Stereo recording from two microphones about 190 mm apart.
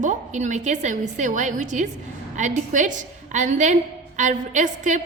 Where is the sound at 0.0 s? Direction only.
40° right (ahead or behind).